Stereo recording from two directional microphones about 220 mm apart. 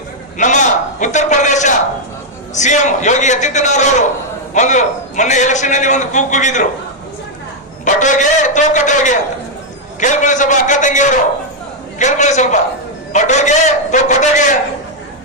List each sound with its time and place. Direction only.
0.3 s a man's voice: 35° left (ahead or behind)
7.9 s a man's voice: 35° left (ahead or behind)